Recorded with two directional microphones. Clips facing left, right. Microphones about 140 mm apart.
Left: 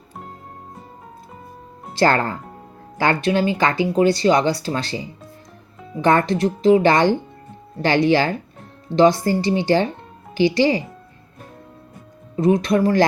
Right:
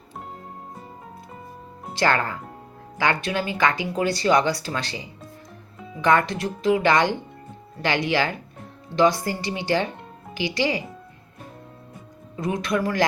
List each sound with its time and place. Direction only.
2.0 s speech: 35° left (ahead or behind)
12.4 s speech: 25° left (ahead or behind)